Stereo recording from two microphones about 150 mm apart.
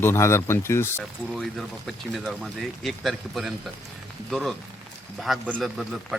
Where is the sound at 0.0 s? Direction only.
15° left (ahead or behind).